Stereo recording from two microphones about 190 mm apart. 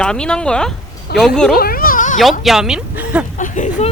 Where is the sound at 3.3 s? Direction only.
40° left (ahead or behind).